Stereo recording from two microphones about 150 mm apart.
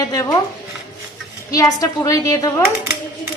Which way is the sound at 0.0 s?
25° left (ahead or behind).